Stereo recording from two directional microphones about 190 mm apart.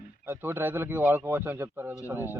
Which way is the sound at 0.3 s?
10° right (ahead or behind).